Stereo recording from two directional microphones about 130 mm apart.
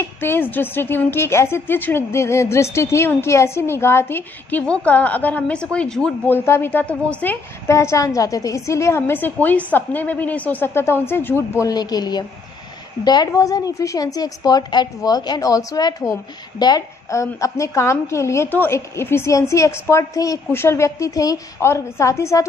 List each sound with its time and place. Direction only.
0.2 s a woman's voice: 15° left (ahead or behind)
11.6 s a woman's voice: 30° left (ahead or behind)